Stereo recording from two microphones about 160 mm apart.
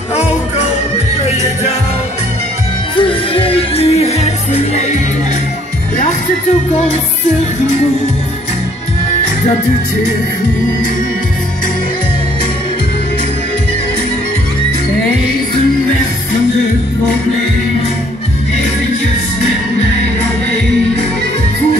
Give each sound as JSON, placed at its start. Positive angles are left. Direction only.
{"t": 3.0, "sound": "music", "side_deg": 35}